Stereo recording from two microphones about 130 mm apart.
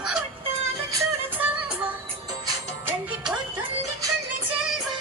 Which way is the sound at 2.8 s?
10° right (ahead or behind).